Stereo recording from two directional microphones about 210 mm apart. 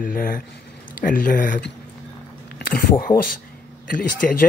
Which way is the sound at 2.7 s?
45° left (ahead or behind).